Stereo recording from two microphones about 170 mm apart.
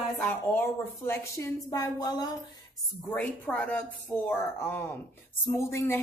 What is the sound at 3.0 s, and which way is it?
Speech, 10° left (ahead or behind).